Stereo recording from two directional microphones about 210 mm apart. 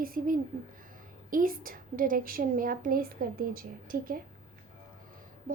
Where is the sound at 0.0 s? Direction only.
45° right (ahead or behind).